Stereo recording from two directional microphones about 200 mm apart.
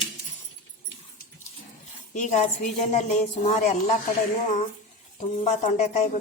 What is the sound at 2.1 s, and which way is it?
A woman's voice, 40° left (ahead or behind).